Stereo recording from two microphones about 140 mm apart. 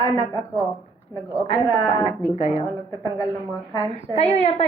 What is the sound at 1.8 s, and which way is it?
Speech, 25° left (ahead or behind).